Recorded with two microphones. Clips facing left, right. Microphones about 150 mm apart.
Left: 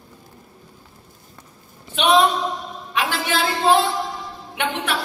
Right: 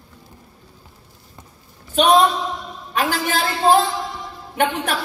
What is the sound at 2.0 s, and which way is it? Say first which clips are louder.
A woman's voice: right 2 dB; 40° right (ahead or behind).